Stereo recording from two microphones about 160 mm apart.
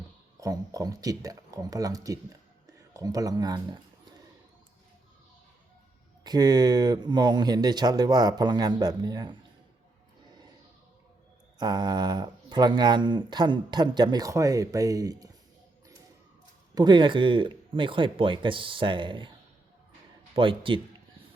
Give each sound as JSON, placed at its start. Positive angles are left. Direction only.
{"t": 0.3, "sound": "speech", "side_deg": -20}
{"t": 6.2, "sound": "speech", "side_deg": -25}
{"t": 11.5, "sound": "speech", "side_deg": -25}
{"t": 16.7, "sound": "speech", "side_deg": -30}
{"t": 20.3, "sound": "speech", "side_deg": -30}